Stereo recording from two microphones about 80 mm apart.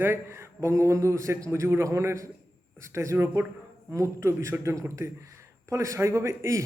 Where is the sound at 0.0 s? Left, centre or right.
Right.